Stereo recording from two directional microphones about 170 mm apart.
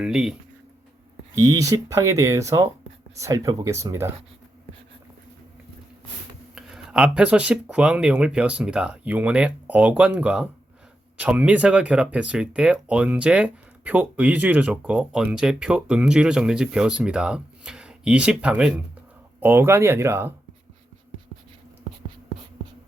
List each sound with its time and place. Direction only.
0.0 s speech: 5° right (ahead or behind)
1.4 s speech: 20° right (ahead or behind)
6.6 s speech: 5° right (ahead or behind)